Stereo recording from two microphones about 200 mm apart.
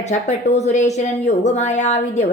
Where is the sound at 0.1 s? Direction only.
35° left (ahead or behind).